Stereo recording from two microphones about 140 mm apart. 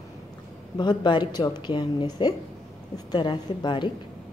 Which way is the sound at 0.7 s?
30° left (ahead or behind).